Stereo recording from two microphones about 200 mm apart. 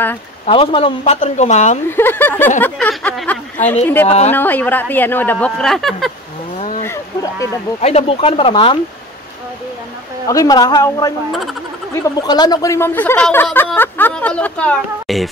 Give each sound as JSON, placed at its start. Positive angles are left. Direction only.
{"t": 0.5, "sound": "speech", "side_deg": 30}
{"t": 1.9, "sound": "speech", "side_deg": 10}
{"t": 6.8, "sound": "a sound", "side_deg": 15}
{"t": 7.8, "sound": "a man's voice", "side_deg": 30}
{"t": 10.2, "sound": "a man's voice", "side_deg": 15}